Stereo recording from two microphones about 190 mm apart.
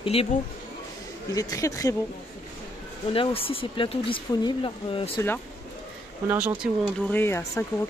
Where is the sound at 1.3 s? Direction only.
15° left (ahead or behind).